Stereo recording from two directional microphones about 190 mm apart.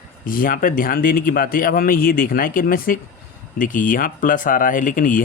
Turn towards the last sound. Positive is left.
turn(degrees=45)  # may be behind; listen again after turning